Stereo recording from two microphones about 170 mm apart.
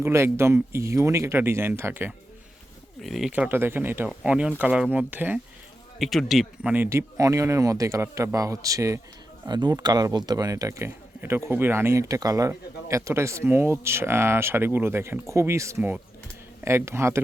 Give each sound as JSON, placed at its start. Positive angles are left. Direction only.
{"t": 0.0, "sound": "speech", "side_deg": -15}
{"t": 3.0, "sound": "speech", "side_deg": 0}